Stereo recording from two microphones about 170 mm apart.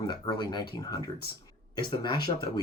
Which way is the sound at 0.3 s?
25° left (ahead or behind).